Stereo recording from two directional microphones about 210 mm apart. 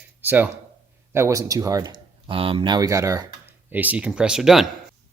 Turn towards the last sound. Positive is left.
turn(degrees=0)  # may be behind; listen again after turning